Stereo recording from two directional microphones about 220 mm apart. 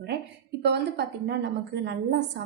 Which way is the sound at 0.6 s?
50° right (ahead or behind).